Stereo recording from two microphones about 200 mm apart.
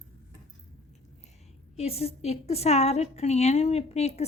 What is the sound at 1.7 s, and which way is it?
A woman's voice, 30° left (ahead or behind).